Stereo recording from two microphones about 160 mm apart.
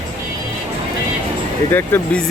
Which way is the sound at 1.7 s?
15° left (ahead or behind).